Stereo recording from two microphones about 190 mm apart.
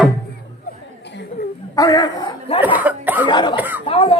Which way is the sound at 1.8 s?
20° left (ahead or behind).